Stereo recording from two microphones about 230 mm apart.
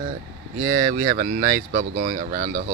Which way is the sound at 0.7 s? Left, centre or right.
Right.